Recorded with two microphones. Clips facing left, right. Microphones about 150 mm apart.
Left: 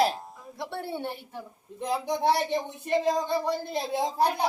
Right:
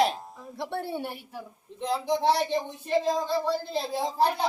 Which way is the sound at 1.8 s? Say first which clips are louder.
Right 1 dB; 15° left (ahead or behind).